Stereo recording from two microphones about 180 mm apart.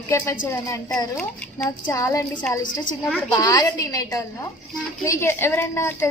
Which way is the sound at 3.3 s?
20° left (ahead or behind).